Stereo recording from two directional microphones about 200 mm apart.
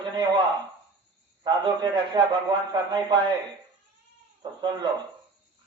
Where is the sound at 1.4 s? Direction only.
25° right (ahead or behind).